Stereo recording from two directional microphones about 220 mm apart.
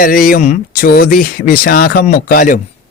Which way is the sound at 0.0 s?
40° left (ahead or behind).